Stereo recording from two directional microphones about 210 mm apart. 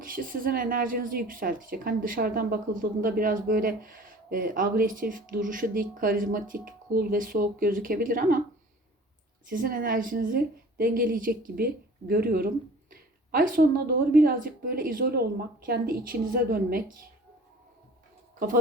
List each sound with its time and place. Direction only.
0.0 s a woman's voice: 40° right (ahead or behind)
9.5 s a woman's voice: 40° right (ahead or behind)